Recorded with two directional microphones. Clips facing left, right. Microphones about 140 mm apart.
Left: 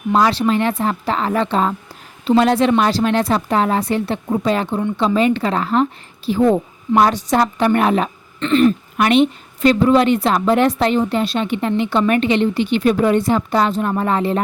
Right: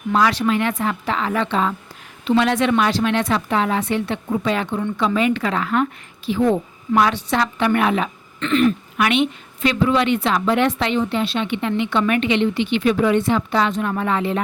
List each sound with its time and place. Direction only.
0.1 s speech: 30° left (ahead or behind)